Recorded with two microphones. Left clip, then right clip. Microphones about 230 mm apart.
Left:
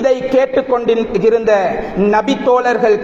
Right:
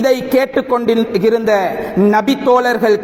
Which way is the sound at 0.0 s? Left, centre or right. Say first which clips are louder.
Left 1 dB; right.